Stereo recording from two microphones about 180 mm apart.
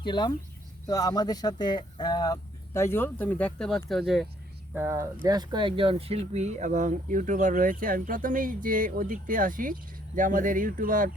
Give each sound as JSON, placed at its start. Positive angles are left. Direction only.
{"t": 0.0, "sound": "speech", "side_deg": 25}
{"t": 4.7, "sound": "speech", "side_deg": -15}